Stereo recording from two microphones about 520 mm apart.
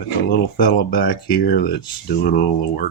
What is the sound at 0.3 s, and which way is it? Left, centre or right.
Speech, centre.